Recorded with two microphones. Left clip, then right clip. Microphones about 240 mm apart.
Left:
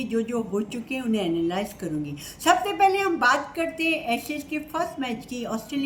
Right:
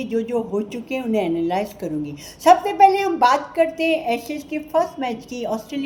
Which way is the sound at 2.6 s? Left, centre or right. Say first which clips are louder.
Right 6 dB; left.